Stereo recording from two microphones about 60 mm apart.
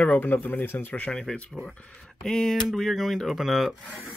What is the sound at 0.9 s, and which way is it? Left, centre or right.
Speech, centre.